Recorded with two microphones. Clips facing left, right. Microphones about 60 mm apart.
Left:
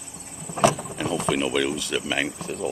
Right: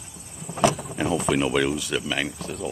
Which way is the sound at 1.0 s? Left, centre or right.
Centre.